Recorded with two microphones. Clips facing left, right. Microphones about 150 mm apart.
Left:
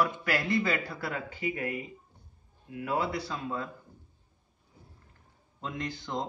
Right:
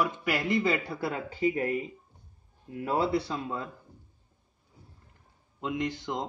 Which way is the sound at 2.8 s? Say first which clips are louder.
Right 4 dB; 30° right (ahead or behind).